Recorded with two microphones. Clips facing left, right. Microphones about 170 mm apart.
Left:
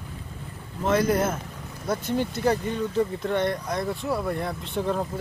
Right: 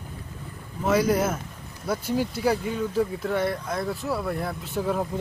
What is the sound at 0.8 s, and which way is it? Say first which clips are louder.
Speech: even; 10° right (ahead or behind).